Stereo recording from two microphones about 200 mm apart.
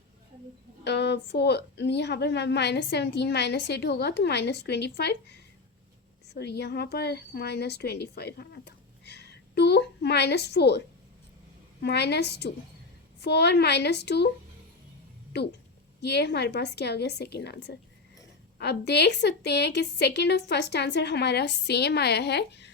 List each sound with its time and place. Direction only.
0.9 s a woman's voice: 55° left (ahead or behind)
16.0 s a woman's voice: 55° left (ahead or behind)